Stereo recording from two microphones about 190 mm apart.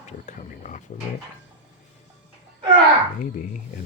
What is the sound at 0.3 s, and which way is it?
Speech, 40° left (ahead or behind).